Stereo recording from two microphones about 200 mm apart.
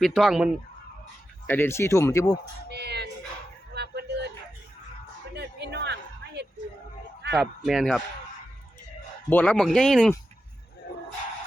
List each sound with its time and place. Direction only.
0.0 s speech: centre (ahead or behind)
1.5 s speech: 10° left (ahead or behind)
2.6 s music: 55° right (ahead or behind)
3.8 s a sound: 55° right (ahead or behind)
5.4 s a sound: 55° right (ahead or behind)
7.3 s speech: centre (ahead or behind)
9.3 s speech: 5° left (ahead or behind)